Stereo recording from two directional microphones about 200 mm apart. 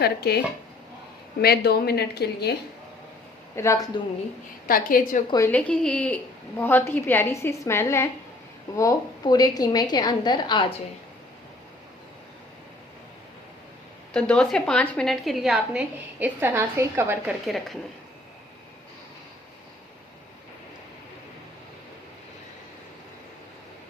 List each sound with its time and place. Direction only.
0.0 s a woman's voice: 55° left (ahead or behind)
3.5 s a woman's voice: 15° left (ahead or behind)
4.7 s a woman's voice: 45° left (ahead or behind)
5.5 s a woman's voice: 5° left (ahead or behind); by 10.8 s 25° left (ahead or behind)
14.1 s a woman's voice: 5° left (ahead or behind)